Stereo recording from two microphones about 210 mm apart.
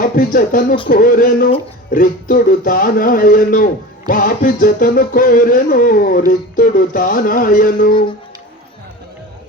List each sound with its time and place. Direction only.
0.0 s speech: 40° left (ahead or behind)
0.9 s a sound: 40° left (ahead or behind)
1.9 s speech: 40° left (ahead or behind)